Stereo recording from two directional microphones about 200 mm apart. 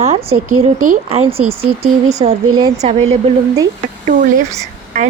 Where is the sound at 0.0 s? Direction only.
35° right (ahead or behind).